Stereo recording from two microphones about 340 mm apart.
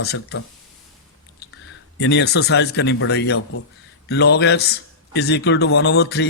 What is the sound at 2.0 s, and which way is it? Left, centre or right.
A man's voice, left.